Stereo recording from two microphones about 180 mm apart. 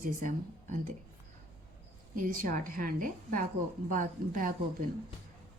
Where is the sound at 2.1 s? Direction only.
50° right (ahead or behind).